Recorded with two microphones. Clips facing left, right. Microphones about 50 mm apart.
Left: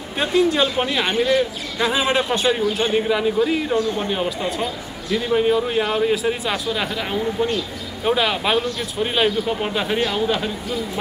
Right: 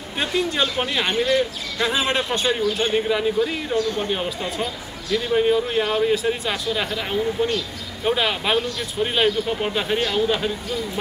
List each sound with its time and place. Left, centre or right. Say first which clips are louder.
0.2 s speech: left 5 dB; centre
4.1 s speech: left 2 dB; centre